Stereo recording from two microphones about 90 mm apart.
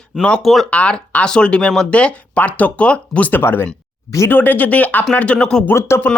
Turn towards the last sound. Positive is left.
turn(degrees=30)  # may be behind; listen again after turning